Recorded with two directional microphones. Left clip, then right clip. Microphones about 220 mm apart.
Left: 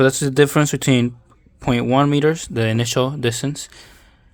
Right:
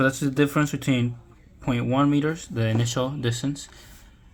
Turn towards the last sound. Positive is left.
turn(degrees=45)  # may be behind; listen again after turning